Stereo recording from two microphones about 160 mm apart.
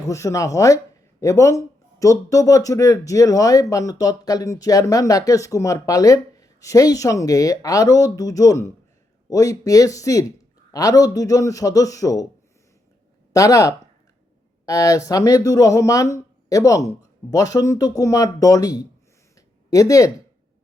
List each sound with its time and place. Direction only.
0.1 s speech: 20° left (ahead or behind)
13.3 s speech: 20° left (ahead or behind)